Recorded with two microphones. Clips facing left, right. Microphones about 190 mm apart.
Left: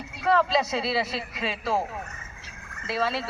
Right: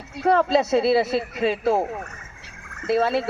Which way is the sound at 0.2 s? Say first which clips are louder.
Right 4 dB; 50° right (ahead or behind).